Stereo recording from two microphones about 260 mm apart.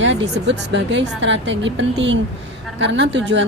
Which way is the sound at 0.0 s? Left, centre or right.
Right.